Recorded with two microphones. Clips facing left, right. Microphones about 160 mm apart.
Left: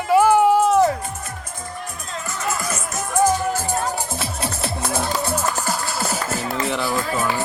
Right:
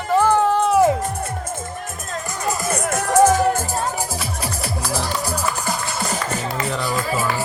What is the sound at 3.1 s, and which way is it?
Music, 85° right.